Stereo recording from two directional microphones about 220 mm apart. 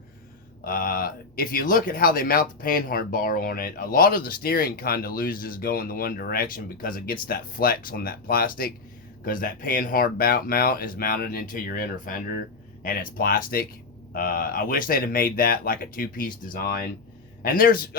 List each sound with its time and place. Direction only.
0.6 s speech: 40° left (ahead or behind)